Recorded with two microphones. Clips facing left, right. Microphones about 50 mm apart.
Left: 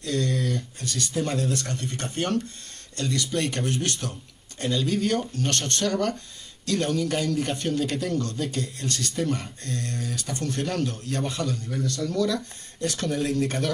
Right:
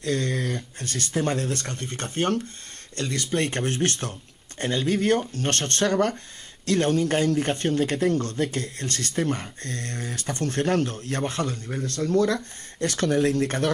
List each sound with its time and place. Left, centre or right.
0.0 s a man's voice: right